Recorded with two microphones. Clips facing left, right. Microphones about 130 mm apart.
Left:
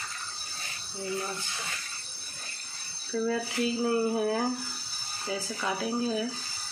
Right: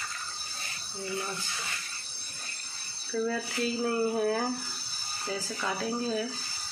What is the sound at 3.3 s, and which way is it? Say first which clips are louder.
Speech: left 2 dB; 15° left (ahead or behind).